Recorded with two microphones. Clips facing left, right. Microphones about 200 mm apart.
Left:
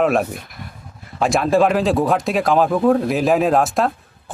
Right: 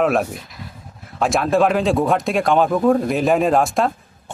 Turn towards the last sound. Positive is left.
turn(degrees=0)  # may be behind; listen again after turning